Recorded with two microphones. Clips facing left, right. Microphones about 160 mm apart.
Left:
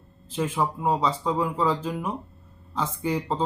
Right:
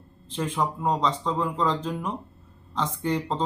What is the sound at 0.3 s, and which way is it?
Speech, 5° left (ahead or behind).